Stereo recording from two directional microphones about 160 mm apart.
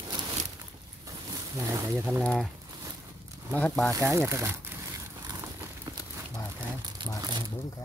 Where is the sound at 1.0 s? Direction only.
20° right (ahead or behind).